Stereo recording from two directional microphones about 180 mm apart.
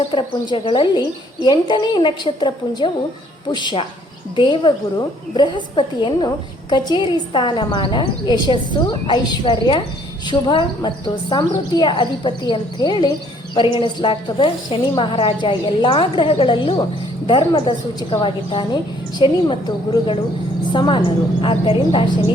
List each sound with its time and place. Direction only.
0.3 s a woman's voice: 25° left (ahead or behind)